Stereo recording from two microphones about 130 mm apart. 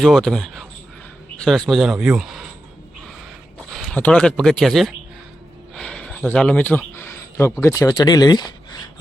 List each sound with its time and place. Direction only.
0.0 s speech: centre (ahead or behind)
3.8 s speech: 5° left (ahead or behind); by 8.8 s 30° left (ahead or behind)